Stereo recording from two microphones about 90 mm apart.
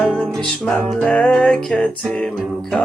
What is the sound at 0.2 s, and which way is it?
Music, 10° left (ahead or behind).